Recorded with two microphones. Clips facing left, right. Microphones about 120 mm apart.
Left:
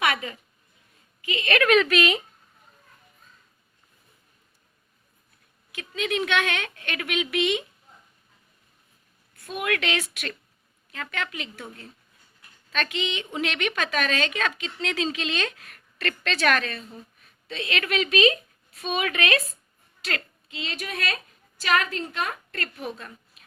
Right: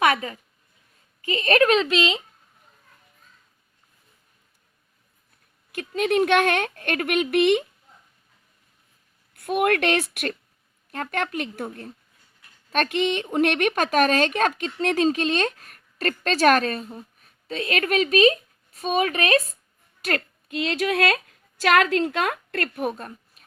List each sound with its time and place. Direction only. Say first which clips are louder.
0.0 s a woman's voice: right 5 dB; 40° right (ahead or behind)
5.7 s a woman's voice: right 6 dB; 50° right (ahead or behind)
9.3 s a woman's voice: right 7 dB; 60° right (ahead or behind); by 23.4 s 45° right (ahead or behind)